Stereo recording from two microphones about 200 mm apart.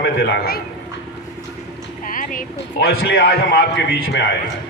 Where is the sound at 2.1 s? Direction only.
40° left (ahead or behind).